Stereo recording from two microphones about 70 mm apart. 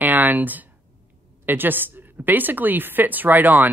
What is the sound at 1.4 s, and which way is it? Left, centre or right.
Speech, right.